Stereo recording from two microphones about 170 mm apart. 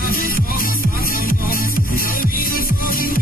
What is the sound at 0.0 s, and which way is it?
Music, 55° left (ahead or behind).